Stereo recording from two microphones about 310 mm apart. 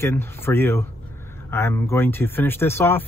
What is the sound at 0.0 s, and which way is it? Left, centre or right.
Speech, centre.